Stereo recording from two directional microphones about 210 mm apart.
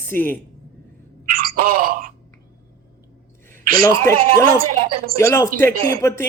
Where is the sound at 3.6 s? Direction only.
40° right (ahead or behind).